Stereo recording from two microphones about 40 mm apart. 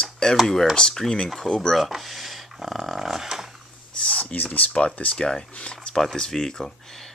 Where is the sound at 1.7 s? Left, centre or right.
Centre.